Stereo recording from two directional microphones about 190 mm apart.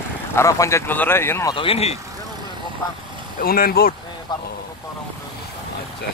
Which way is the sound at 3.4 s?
50° left (ahead or behind).